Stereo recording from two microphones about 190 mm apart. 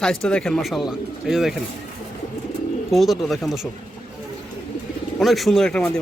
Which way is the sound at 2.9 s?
Centre (ahead or behind).